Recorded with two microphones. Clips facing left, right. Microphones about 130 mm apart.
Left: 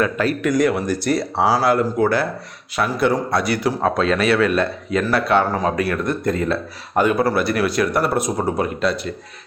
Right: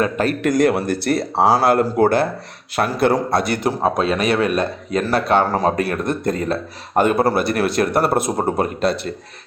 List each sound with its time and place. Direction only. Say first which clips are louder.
0.3 s speech: right 3 dB; 50° right (ahead or behind)
3.6 s speech: even; 20° right (ahead or behind)
4.6 s speech: even; 35° right (ahead or behind)
5.9 s speech: even; 25° right (ahead or behind)
6.2 s speech: even; 40° right (ahead or behind)